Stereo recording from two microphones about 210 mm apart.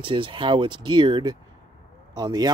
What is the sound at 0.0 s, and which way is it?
Speech, 25° right (ahead or behind).